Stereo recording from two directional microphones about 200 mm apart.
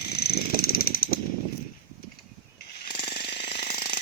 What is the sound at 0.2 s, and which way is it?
Mechanisms, 50° left (ahead or behind).